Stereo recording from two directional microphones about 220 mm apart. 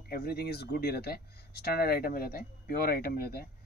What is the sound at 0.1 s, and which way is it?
Speech, 45° left (ahead or behind).